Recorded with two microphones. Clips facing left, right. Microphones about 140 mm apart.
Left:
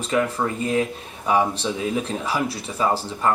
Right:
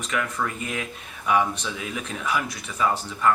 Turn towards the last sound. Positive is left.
turn(degrees=30)  # may be behind; listen again after turning